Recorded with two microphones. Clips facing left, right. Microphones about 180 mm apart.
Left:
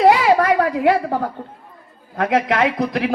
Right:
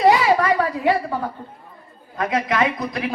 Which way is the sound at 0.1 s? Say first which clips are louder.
Left 2 dB; 65° left (ahead or behind).